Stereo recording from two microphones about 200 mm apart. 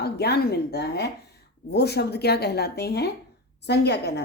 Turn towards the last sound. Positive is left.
turn(degrees=55)  # may be behind; listen again after turning